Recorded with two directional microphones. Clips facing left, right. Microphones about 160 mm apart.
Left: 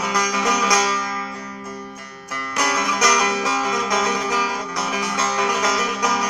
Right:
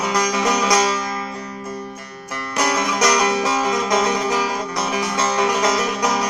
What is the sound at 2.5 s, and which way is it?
Music, 25° right (ahead or behind).